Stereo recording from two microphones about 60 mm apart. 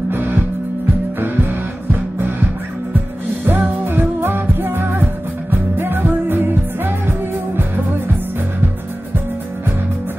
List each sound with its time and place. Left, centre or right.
0.1 s music: right
3.4 s music: right